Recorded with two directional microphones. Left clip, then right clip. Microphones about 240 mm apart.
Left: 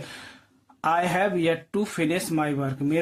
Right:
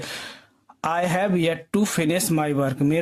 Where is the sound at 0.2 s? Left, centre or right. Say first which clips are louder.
Right 7 dB; right.